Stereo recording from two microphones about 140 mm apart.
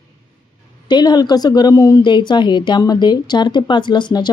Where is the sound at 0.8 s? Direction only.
30° left (ahead or behind).